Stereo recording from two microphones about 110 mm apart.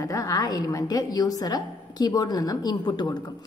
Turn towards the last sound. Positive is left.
turn(degrees=40)  # may be behind; listen again after turning